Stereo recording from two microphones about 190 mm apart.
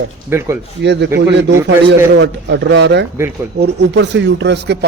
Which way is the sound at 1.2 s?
65° right (ahead or behind).